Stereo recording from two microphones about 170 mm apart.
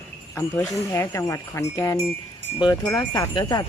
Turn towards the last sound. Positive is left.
turn(degrees=25)  # may be behind; listen again after turning